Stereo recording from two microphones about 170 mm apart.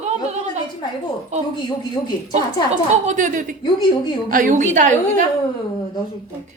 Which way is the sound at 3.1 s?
50° right (ahead or behind).